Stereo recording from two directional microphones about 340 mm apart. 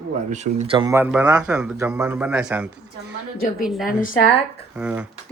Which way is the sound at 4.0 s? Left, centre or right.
Left.